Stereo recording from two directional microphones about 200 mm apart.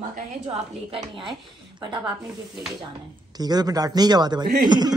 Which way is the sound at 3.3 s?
20° right (ahead or behind).